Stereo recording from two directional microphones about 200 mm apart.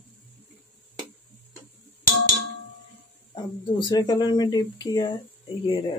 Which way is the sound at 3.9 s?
20° left (ahead or behind).